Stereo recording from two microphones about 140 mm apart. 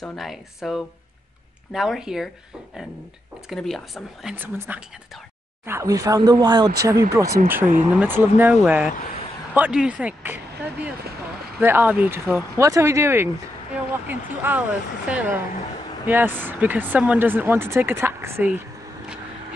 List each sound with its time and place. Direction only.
0.0 s speech: centre (ahead or behind)
3.4 s speech: centre (ahead or behind)
4.4 s speech: 10° right (ahead or behind)